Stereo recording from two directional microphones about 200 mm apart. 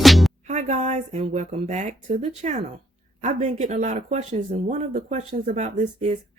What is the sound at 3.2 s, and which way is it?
Speech, 35° right (ahead or behind).